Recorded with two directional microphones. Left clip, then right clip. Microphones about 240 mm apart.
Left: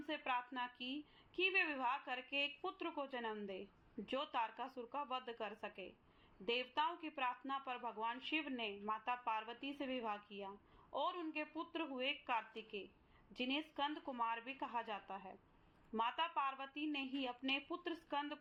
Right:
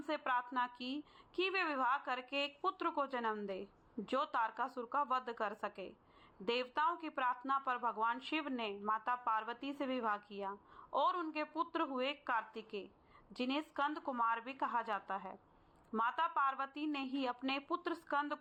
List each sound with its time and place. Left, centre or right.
0.1 s a woman's voice: centre